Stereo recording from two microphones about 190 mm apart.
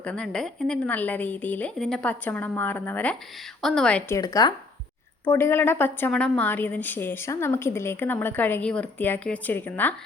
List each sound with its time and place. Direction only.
0.0 s a woman's voice: 5° left (ahead or behind)
4.2 s a woman's voice: 20° left (ahead or behind)